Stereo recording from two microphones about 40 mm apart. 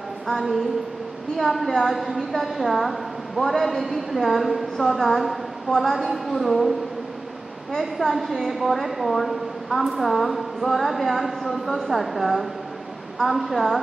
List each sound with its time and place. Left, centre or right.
0.4 s a woman's voice: centre
2.0 s a woman's voice: centre
8.0 s a woman's voice: centre